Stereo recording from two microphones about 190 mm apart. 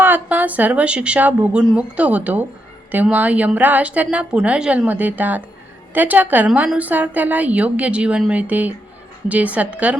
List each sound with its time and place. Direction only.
0.0 s a woman's voice: 10° right (ahead or behind)